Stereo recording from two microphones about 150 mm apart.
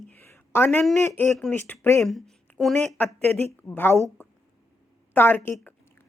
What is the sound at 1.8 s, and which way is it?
Speech, 20° left (ahead or behind).